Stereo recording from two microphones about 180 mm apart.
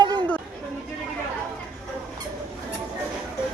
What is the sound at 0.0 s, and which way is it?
Chatter, 25° right (ahead or behind).